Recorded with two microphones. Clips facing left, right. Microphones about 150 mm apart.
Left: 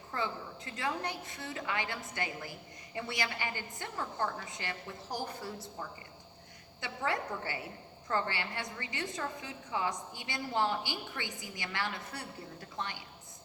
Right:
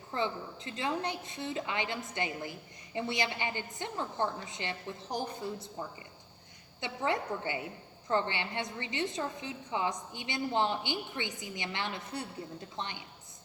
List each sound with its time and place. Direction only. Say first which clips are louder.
0.1 s a woman's voice: right 3 dB; 20° right (ahead or behind)
6.7 s a woman's voice: right 2 dB; 20° right (ahead or behind)